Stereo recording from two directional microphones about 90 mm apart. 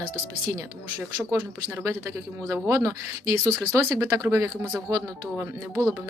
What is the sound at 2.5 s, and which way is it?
A woman's voice, 30° right (ahead or behind).